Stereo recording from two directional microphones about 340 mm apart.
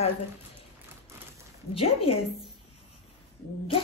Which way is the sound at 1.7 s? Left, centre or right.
Centre.